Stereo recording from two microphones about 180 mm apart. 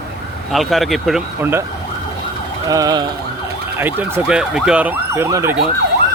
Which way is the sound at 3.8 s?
10° right (ahead or behind).